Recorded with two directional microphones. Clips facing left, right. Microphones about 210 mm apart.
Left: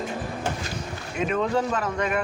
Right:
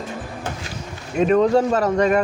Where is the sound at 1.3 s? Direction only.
40° right (ahead or behind).